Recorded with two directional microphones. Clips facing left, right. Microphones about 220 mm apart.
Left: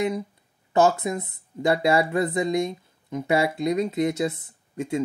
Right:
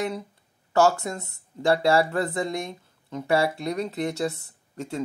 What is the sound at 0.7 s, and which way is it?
Speech, 15° left (ahead or behind).